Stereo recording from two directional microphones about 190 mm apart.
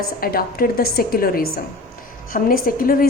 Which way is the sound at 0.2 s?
50° left (ahead or behind).